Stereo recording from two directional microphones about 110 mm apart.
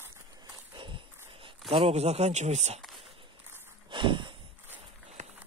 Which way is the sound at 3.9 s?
45° right (ahead or behind).